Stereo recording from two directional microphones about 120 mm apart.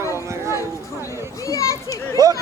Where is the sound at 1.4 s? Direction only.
25° left (ahead or behind).